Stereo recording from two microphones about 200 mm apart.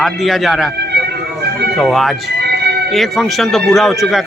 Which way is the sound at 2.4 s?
55° right (ahead or behind).